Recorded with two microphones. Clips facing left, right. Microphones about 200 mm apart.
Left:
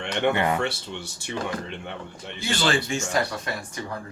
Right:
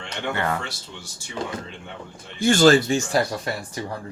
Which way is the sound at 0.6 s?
65° left (ahead or behind).